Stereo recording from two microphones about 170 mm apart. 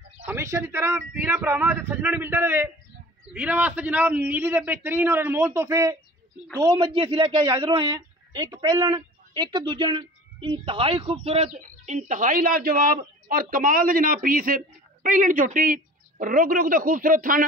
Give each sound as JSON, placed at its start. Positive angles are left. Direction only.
{"t": 0.2, "sound": "a man's voice", "side_deg": -15}